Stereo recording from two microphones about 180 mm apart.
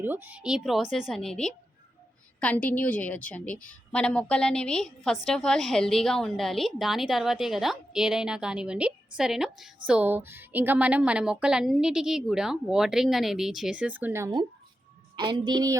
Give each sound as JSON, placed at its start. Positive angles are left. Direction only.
{"t": 0.0, "sound": "a woman's voice", "side_deg": -10}
{"t": 15.1, "sound": "a woman's voice", "side_deg": -25}